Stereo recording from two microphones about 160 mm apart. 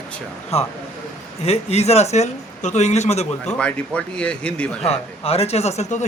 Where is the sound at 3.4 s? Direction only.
5° left (ahead or behind).